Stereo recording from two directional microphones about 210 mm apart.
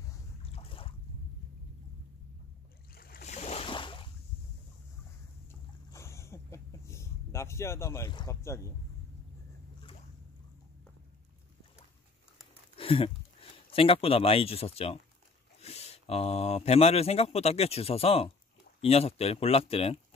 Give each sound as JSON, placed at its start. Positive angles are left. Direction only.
{"t": 0.4, "sound": "boat", "side_deg": 25}
{"t": 2.9, "sound": "boat", "side_deg": 45}
{"t": 3.3, "sound": "boat", "side_deg": 30}
{"t": 5.5, "sound": "boat", "side_deg": 15}
{"t": 12.7, "sound": "a sound", "side_deg": 25}
{"t": 13.7, "sound": "speech", "side_deg": 25}